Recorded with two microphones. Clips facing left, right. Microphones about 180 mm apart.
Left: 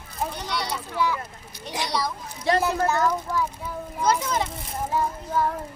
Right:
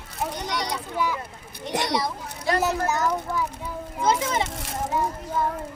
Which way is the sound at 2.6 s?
20° right (ahead or behind).